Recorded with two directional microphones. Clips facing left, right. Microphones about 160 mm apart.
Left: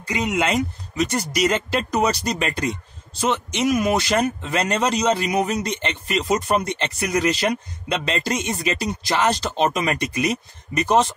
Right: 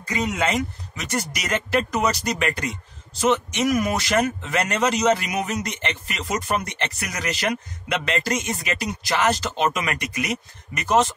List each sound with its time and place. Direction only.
0.2 s speech: 10° left (ahead or behind)
1.1 s a man's voice: 25° left (ahead or behind)